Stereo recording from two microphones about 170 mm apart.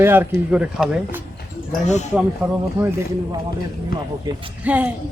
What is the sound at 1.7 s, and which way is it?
Speech, 40° left (ahead or behind).